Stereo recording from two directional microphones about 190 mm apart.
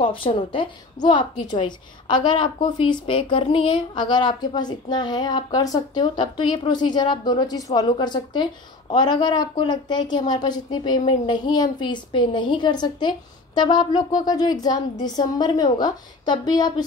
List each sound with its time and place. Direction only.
0.0 s a woman's voice: 25° left (ahead or behind)